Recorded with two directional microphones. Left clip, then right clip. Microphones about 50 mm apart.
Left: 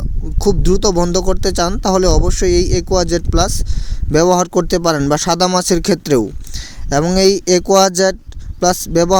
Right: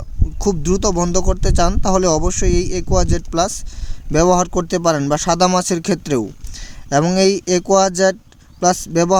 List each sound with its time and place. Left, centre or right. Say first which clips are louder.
0.3 s speech: left 3 dB; left